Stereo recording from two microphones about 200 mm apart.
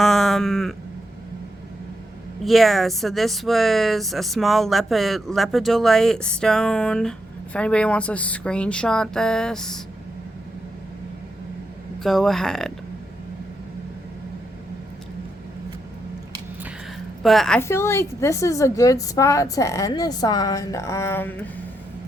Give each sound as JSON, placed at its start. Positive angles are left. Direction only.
{"t": 0.0, "sound": "sheep", "side_deg": 0}
{"t": 2.4, "sound": "speech", "side_deg": 0}
{"t": 12.0, "sound": "speech", "side_deg": 0}
{"t": 17.2, "sound": "speech", "side_deg": 0}
{"t": 17.6, "sound": "a woman's voice", "side_deg": 15}